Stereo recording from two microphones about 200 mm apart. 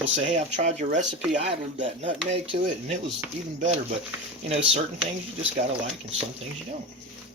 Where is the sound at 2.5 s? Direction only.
35° right (ahead or behind).